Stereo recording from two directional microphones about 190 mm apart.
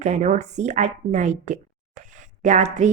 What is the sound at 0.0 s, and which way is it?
A woman's voice, 40° right (ahead or behind).